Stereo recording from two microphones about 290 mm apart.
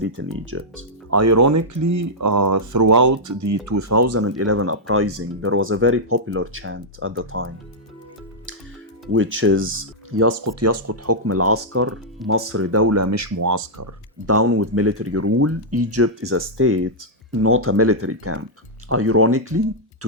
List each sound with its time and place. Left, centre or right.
0.0 s speech: right
1.1 s speech: right
9.1 s speech: right
10.2 s speech: right
14.3 s speech: right